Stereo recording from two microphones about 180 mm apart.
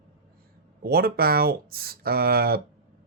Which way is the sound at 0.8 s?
55° right (ahead or behind).